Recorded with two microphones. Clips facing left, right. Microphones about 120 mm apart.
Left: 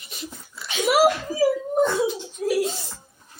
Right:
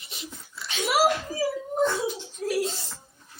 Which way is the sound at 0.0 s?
20° right (ahead or behind).